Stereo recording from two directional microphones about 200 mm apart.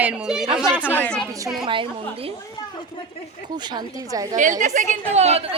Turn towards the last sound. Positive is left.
turn(degrees=-30)  # may be behind; listen again after turning